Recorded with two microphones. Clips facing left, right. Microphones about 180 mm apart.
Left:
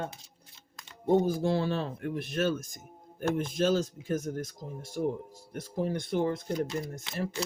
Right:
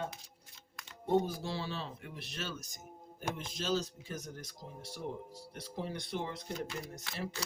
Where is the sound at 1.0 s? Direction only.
50° left (ahead or behind).